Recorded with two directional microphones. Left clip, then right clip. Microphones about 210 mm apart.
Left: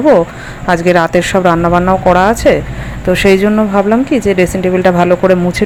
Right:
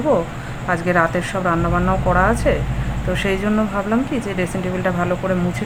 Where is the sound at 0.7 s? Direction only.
35° left (ahead or behind).